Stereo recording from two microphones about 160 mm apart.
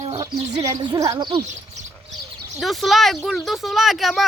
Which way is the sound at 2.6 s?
Centre (ahead or behind).